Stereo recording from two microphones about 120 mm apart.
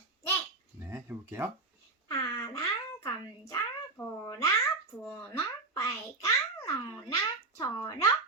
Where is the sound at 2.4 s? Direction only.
25° left (ahead or behind).